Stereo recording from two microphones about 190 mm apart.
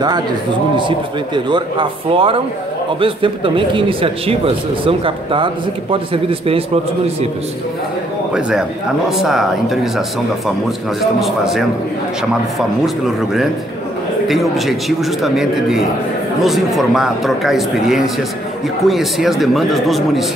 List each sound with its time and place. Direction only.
0.7 s a man's voice: 25° right (ahead or behind)
8.3 s a man's voice: 5° right (ahead or behind)